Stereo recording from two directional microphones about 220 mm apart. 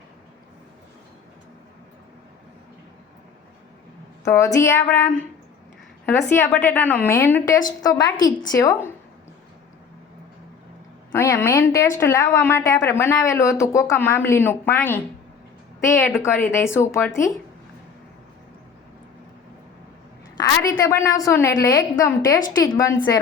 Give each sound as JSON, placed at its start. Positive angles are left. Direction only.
{"t": 4.2, "sound": "a woman's voice", "side_deg": 15}
{"t": 11.1, "sound": "a woman's voice", "side_deg": 10}
{"t": 20.7, "sound": "a woman's voice", "side_deg": 15}